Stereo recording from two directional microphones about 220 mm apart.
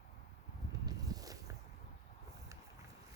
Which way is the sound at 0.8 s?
15° right (ahead or behind).